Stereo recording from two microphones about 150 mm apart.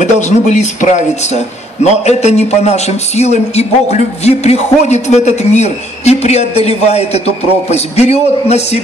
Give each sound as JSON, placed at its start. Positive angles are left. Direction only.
{"t": 0.0, "sound": "speech", "side_deg": 50}